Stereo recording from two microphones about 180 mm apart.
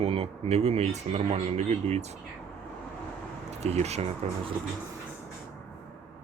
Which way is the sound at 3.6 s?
35° right (ahead or behind).